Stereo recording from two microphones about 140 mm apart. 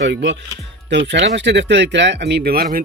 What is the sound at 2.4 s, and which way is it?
Speech, 90° right.